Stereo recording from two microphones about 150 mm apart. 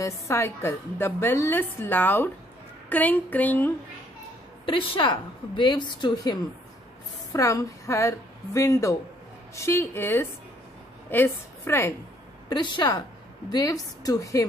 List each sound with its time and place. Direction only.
0.0 s a woman's voice: 20° left (ahead or behind)
4.6 s a woman's voice: 35° left (ahead or behind); by 11.9 s 15° left (ahead or behind)
12.4 s a woman's voice: 30° left (ahead or behind)